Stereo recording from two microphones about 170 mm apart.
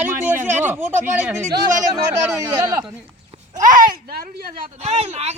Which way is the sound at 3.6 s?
55° right (ahead or behind).